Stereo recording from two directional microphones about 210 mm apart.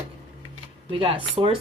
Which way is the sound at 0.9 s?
25° right (ahead or behind).